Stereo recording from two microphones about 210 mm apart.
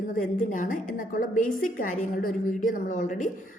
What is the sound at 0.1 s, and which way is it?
A woman's voice, 40° left (ahead or behind).